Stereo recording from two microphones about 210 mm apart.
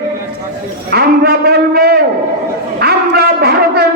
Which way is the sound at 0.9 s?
50° right (ahead or behind).